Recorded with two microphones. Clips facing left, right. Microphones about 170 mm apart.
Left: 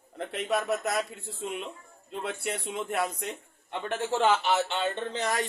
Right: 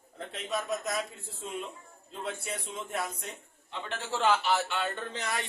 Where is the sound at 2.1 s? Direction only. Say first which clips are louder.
Left 4 dB; 65° left (ahead or behind).